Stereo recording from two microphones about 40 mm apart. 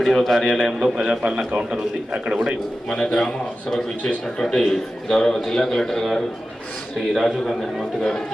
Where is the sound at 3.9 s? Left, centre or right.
Left.